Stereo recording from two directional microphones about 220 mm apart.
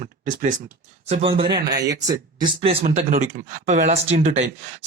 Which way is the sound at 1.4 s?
45° right (ahead or behind).